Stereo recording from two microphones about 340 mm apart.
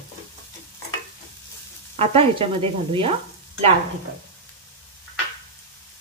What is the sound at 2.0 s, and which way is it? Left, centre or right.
Sizzle, centre.